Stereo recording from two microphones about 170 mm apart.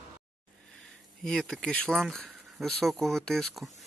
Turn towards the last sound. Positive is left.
turn(degrees=0)  # may be behind; listen again after turning